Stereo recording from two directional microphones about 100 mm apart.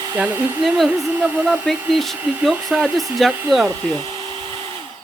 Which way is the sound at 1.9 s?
Centre (ahead or behind).